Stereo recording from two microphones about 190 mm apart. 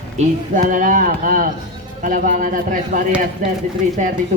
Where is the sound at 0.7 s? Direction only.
45° right (ahead or behind).